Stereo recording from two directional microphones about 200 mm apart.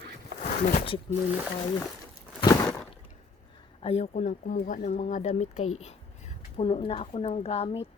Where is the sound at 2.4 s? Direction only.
15° left (ahead or behind).